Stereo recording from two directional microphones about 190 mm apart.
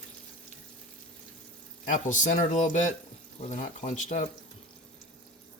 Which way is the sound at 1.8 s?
40° left (ahead or behind).